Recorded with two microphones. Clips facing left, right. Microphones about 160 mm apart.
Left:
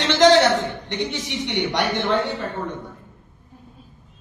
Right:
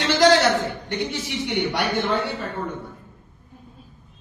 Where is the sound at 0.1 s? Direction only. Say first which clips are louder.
Left 2 dB; 10° right (ahead or behind).